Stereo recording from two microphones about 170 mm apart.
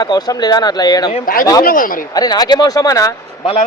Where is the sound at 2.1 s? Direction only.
25° left (ahead or behind).